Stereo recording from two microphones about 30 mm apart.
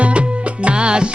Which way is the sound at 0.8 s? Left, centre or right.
Right.